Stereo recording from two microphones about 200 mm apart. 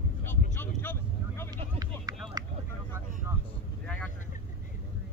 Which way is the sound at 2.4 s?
20° right (ahead or behind).